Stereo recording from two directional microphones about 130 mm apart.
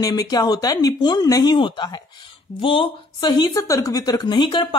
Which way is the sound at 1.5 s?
40° left (ahead or behind).